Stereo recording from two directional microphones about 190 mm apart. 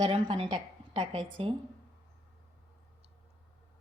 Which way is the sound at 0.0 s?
30° right (ahead or behind).